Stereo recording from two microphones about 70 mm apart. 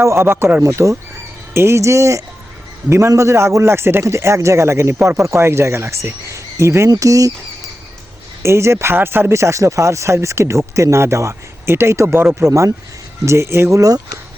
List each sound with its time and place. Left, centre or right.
0.0 s speech: right
6.9 s speech: right
8.4 s speech: right
12.4 s speech: right